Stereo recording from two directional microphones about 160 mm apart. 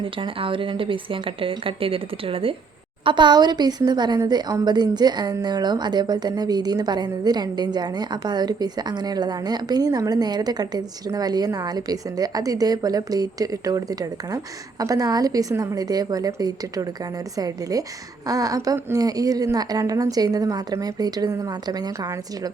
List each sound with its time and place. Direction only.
0.0 s a woman's voice: 35° right (ahead or behind)